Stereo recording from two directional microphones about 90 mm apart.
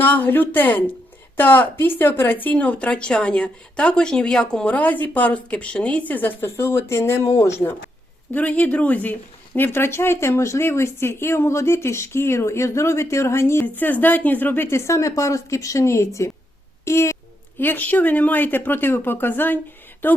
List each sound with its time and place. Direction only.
0.0 s speech: 20° left (ahead or behind)
8.3 s a woman's voice: 15° left (ahead or behind); by 16.3 s 30° left (ahead or behind)
16.8 s a sound: 30° left (ahead or behind)
17.6 s speech: 20° left (ahead or behind)